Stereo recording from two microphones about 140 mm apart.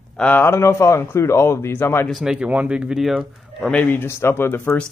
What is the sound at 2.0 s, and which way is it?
Speech, centre (ahead or behind).